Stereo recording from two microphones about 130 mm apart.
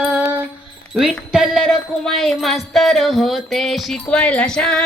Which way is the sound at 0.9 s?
5° right (ahead or behind).